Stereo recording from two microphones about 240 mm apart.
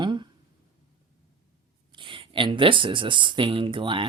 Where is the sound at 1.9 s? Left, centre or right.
Right.